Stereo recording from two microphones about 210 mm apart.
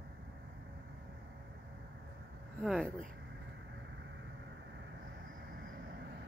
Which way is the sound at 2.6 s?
Centre (ahead or behind).